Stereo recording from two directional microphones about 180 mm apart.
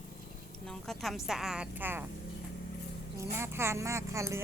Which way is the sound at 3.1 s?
15° right (ahead or behind).